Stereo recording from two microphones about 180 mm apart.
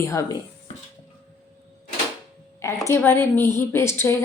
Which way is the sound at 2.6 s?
15° left (ahead or behind).